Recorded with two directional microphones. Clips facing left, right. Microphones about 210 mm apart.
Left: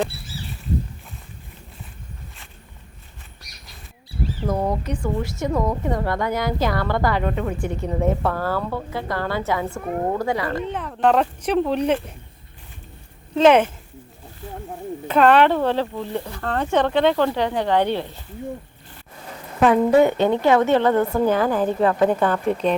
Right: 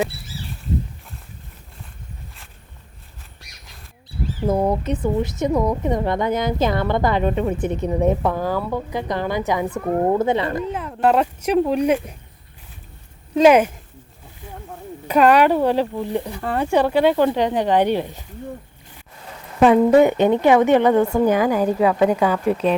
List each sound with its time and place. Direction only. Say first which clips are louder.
4.8 s a woman's voice: right 4 dB; 20° right (ahead or behind)
10.7 s speech: even; 5° right (ahead or behind)
13.3 s speech: right 2 dB; 10° right (ahead or behind)
15.0 s speech: right 1 dB; 10° right (ahead or behind)
19.6 s speech: right 3 dB; 20° right (ahead or behind)